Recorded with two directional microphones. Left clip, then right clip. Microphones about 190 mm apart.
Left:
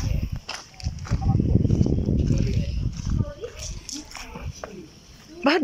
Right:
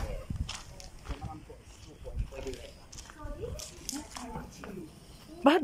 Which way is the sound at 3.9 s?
10° left (ahead or behind).